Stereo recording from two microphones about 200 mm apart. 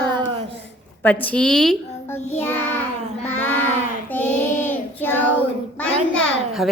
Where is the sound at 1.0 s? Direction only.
10° left (ahead or behind).